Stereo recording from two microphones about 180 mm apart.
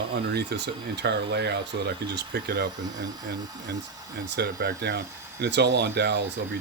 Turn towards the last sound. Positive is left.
turn(degrees=-70)  # may be behind; listen again after turning